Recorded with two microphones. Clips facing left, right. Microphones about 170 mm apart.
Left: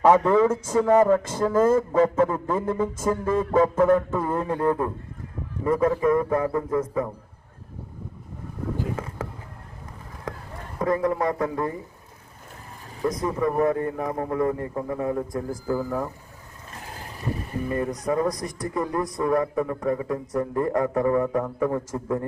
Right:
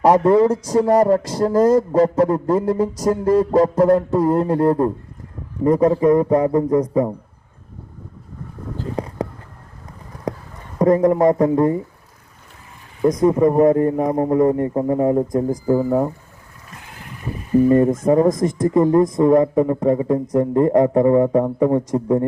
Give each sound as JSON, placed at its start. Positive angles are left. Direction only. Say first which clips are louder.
{"t": 0.0, "sound": "speech", "louder": "right 4 dB", "side_deg": -35}
{"t": 6.3, "sound": "a man's voice", "louder": "right 8 dB", "side_deg": -20}
{"t": 6.6, "sound": "speech", "louder": "right 8 dB", "side_deg": -40}
{"t": 10.9, "sound": "speech", "louder": "right 9 dB", "side_deg": -40}
{"t": 13.0, "sound": "speech", "louder": "right 9 dB", "side_deg": -20}
{"t": 13.2, "sound": "speech", "louder": "right 9 dB", "side_deg": -35}
{"t": 17.7, "sound": "a man's voice", "louder": "right 8 dB", "side_deg": -35}